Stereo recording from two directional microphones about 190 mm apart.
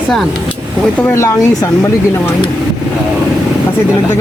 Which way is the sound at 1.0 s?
15° left (ahead or behind).